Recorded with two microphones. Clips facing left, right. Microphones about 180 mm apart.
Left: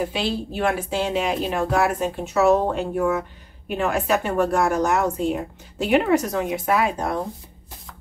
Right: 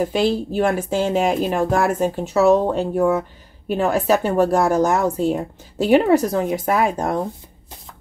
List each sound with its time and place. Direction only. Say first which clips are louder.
0.0 s a woman's voice: right 6 dB; 45° right (ahead or behind)